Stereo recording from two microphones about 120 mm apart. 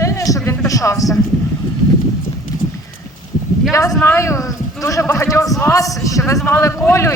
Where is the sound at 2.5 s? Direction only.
30° left (ahead or behind).